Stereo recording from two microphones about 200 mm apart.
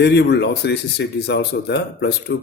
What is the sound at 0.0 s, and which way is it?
Speech, 55° left (ahead or behind).